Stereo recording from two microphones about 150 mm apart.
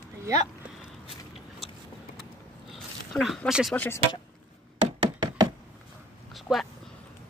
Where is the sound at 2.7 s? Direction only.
Centre (ahead or behind).